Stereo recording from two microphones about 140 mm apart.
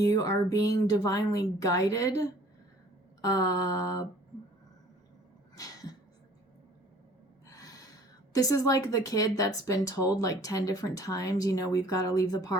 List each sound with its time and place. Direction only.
0.0 s speech: 25° left (ahead or behind)
3.2 s speech: 25° left (ahead or behind)
5.5 s a sound: 25° left (ahead or behind)
7.5 s gasp: 25° left (ahead or behind)
8.3 s speech: 25° left (ahead or behind)